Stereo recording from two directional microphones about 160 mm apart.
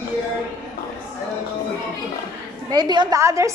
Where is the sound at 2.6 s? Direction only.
25° right (ahead or behind).